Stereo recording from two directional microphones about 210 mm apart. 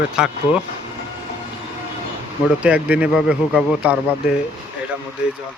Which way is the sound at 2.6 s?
5° right (ahead or behind).